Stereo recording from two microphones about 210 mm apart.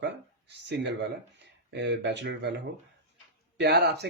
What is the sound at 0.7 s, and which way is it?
Speech, 55° right (ahead or behind).